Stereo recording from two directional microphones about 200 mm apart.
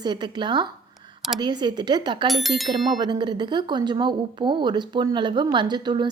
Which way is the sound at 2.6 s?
20° right (ahead or behind).